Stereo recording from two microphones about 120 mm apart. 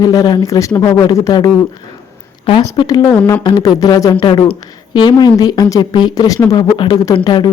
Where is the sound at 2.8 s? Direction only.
30° left (ahead or behind).